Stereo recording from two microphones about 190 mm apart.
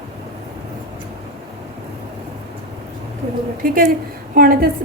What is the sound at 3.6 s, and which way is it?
A woman's voice, 45° right (ahead or behind).